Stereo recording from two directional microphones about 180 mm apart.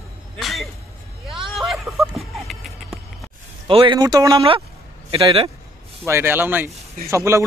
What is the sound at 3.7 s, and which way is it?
A man's voice, 30° right (ahead or behind).